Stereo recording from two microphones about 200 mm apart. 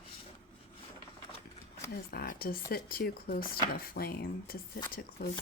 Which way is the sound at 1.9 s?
50° left (ahead or behind).